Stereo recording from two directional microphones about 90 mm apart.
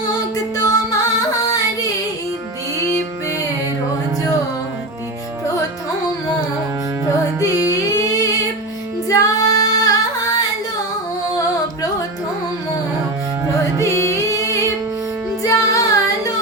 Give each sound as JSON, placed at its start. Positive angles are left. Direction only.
{"t": 0.5, "sound": "singing", "side_deg": 40}
{"t": 7.9, "sound": "humming", "side_deg": 40}
{"t": 9.0, "sound": "female singing", "side_deg": 40}
{"t": 11.3, "sound": "music", "side_deg": 40}
{"t": 13.8, "sound": "music", "side_deg": 35}
{"t": 15.4, "sound": "child singing", "side_deg": 40}